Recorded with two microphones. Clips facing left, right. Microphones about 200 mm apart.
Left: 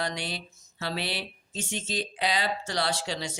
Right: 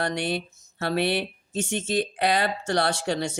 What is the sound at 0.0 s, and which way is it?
Speech, 55° right (ahead or behind).